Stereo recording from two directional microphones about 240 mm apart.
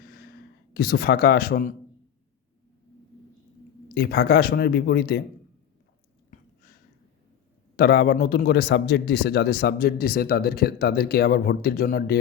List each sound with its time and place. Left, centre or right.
0.0 s a sound: left
3.8 s speech: left
7.8 s speech: left